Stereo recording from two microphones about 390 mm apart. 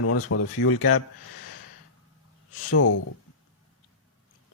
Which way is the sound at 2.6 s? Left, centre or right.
Left.